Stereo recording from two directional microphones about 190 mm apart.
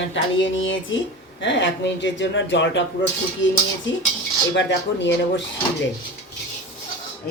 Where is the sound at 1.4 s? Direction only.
70° left (ahead or behind).